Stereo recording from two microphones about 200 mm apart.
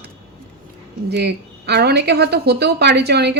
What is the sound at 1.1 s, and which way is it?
A woman's voice, 55° right (ahead or behind).